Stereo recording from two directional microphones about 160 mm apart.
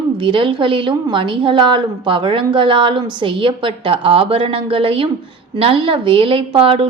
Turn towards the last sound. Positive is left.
turn(degrees=-35)  # may be behind; listen again after turning